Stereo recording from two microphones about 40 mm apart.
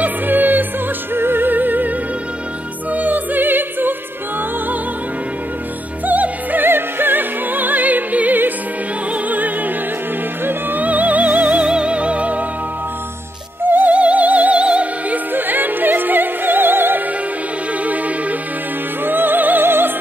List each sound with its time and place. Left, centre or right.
0.0 s music: right
1.1 s music: right
2.9 s opera: right
6.0 s music: right
6.6 s music: right
10.8 s music: right
11.6 s music: right
13.7 s music: right
13.9 s music: right
15.3 s music: right
19.0 s music: right